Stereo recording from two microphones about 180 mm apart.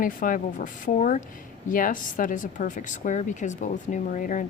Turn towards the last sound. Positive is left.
turn(degrees=45)  # may be behind; listen again after turning